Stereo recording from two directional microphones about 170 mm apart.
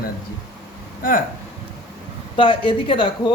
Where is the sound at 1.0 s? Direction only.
55° left (ahead or behind).